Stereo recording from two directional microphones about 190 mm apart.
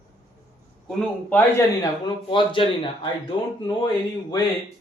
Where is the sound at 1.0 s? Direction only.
5° left (ahead or behind).